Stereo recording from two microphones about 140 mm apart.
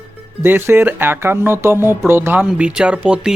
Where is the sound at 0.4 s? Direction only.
15° right (ahead or behind).